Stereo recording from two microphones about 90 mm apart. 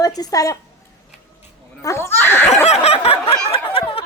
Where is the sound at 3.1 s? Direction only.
90° left.